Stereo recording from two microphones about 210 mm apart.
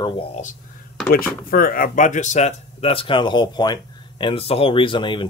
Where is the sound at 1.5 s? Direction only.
45° left (ahead or behind).